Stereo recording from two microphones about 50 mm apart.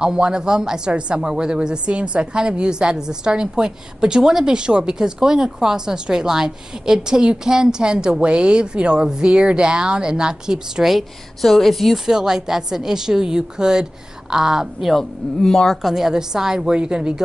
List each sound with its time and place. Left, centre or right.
0.0 s a woman's voice: centre
12.1 s a woman's voice: centre
15.0 s speech: centre
15.8 s a woman's voice: centre